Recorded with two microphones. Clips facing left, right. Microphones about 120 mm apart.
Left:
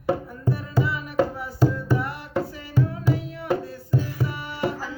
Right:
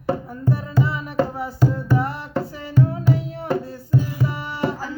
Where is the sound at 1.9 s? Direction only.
30° right (ahead or behind).